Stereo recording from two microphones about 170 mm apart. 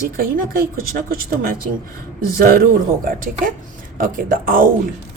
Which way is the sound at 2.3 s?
60° right (ahead or behind).